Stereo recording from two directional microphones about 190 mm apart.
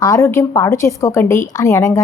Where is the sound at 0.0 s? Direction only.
15° left (ahead or behind).